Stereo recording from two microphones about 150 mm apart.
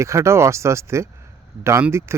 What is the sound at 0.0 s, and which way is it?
Speech, 20° right (ahead or behind).